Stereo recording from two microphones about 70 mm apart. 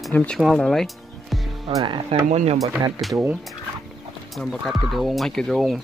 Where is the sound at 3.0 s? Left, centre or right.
Centre.